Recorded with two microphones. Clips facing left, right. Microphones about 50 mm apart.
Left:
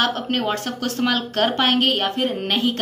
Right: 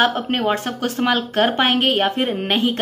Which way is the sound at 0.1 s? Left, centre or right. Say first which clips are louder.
Right 3 dB; centre.